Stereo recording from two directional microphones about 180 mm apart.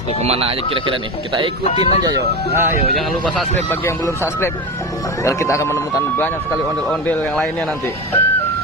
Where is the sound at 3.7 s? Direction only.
15° left (ahead or behind).